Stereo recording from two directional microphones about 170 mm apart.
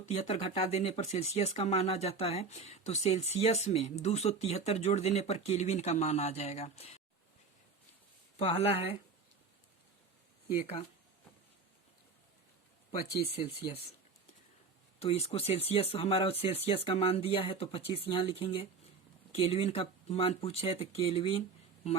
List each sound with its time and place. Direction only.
0.0 s speech: 40° left (ahead or behind)
8.4 s speech: 35° left (ahead or behind)
14.9 s speech: 35° left (ahead or behind)